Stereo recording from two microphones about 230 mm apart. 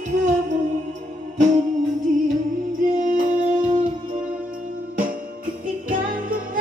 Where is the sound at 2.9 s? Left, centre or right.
Right.